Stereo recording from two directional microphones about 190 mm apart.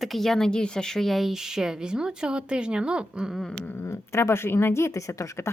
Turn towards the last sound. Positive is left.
turn(degrees=15)  # may be behind; listen again after turning